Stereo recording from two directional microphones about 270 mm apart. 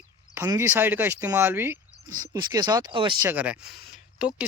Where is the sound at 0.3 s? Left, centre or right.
Centre.